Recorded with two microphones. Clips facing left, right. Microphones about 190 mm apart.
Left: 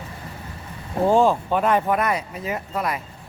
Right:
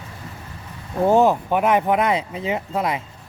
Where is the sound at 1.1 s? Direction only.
20° right (ahead or behind).